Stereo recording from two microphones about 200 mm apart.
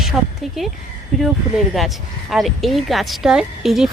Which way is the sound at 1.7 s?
Centre (ahead or behind).